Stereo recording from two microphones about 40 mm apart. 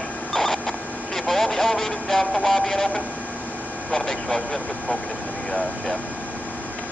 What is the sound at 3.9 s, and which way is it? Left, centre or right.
Speech, centre.